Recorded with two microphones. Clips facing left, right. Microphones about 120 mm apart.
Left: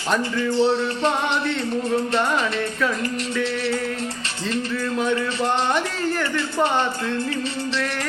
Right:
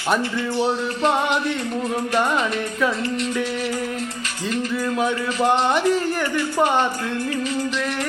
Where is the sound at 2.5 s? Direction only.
10° right (ahead or behind).